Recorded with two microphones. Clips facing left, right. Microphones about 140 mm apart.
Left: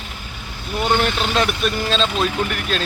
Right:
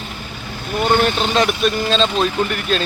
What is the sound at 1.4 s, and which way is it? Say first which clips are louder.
Speech: right 4 dB; 5° left (ahead or behind).